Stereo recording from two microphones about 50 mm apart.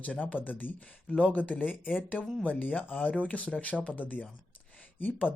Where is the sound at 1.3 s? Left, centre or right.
Left.